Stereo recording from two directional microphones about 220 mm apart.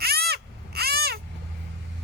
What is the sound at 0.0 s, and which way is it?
Crow, 45° right (ahead or behind).